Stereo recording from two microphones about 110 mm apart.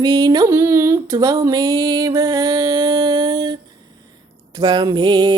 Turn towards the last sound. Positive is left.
turn(degrees=-45)  # may be behind; listen again after turning